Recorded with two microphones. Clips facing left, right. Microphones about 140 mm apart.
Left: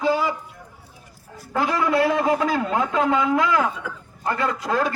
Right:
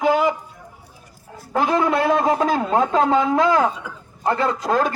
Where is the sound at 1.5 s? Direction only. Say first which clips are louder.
Right 2 dB; 25° right (ahead or behind).